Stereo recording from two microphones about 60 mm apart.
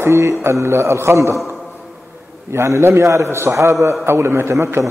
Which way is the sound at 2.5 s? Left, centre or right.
Right.